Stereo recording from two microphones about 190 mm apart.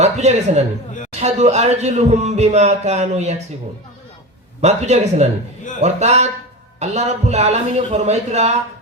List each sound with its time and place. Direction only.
0.0 s a man's voice: 35° right (ahead or behind)
4.6 s a man's voice: 35° right (ahead or behind)